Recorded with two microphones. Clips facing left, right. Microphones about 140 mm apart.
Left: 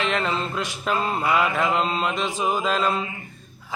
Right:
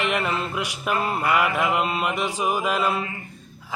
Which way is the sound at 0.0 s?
15° right (ahead or behind).